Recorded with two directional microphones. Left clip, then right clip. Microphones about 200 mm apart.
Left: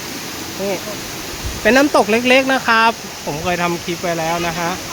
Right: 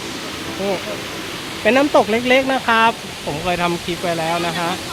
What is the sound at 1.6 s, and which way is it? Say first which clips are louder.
Speech: left 1 dB; 15° left (ahead or behind).